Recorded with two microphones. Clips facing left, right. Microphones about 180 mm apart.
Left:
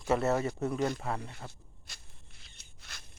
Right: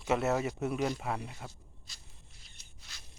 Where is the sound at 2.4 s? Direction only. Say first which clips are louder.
Left 5 dB; 55° left (ahead or behind).